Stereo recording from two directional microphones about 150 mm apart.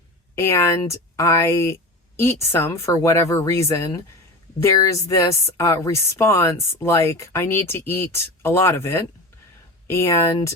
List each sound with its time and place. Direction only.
0.3 s speech: 20° left (ahead or behind)